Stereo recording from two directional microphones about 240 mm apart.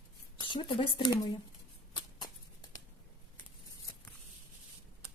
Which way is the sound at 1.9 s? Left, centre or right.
Centre.